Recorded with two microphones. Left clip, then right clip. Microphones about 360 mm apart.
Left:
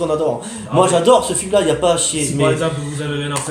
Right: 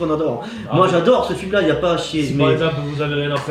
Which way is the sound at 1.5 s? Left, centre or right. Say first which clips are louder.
Left 2 dB; centre.